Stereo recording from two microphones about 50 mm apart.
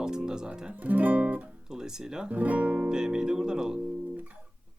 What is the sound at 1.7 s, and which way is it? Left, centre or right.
Speech, centre.